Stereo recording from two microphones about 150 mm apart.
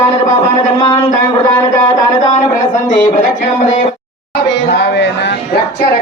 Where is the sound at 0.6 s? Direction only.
30° left (ahead or behind).